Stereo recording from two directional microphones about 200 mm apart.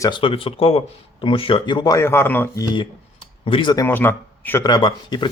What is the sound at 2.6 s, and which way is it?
Speech, 25° left (ahead or behind).